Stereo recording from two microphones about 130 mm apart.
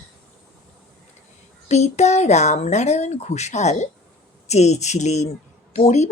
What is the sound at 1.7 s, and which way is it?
Speech, 60° left (ahead or behind).